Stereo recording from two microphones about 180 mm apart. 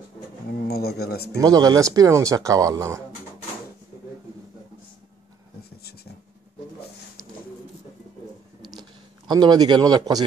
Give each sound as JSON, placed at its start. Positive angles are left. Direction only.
{"t": 0.5, "sound": "a sound", "side_deg": 60}
{"t": 1.4, "sound": "speech", "side_deg": -20}
{"t": 9.3, "sound": "speech", "side_deg": -25}